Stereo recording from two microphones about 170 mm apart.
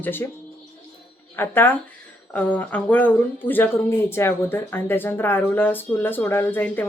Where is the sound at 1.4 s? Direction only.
15° left (ahead or behind).